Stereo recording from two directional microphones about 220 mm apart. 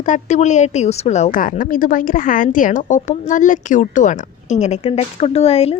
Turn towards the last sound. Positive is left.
turn(degrees=30)  # may be behind; listen again after turning